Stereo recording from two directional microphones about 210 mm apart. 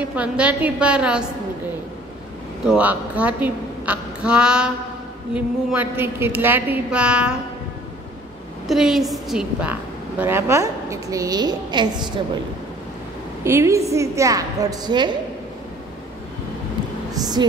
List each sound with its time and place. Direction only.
0.1 s a woman's voice: 5° right (ahead or behind)
2.6 s a woman's voice: 5° right (ahead or behind)
8.6 s a woman's voice: centre (ahead or behind); by 11.9 s 20° right (ahead or behind)
13.4 s a woman's voice: 10° right (ahead or behind)
17.1 s speech: 20° right (ahead or behind)